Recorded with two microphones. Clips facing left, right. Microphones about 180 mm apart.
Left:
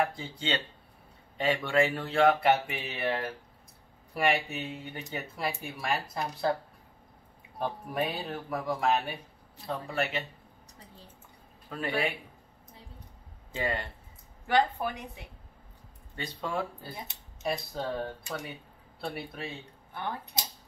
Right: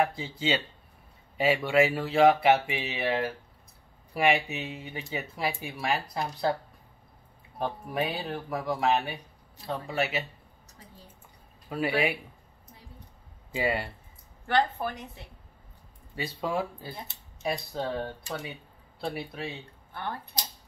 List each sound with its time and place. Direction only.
0.0 s speech: 5° right (ahead or behind)
7.5 s speech: centre (ahead or behind)
11.7 s speech: 10° right (ahead or behind)
13.5 s speech: 10° right (ahead or behind)
14.5 s speech: 10° left (ahead or behind)
16.2 s speech: 5° right (ahead or behind)
19.9 s speech: 15° left (ahead or behind)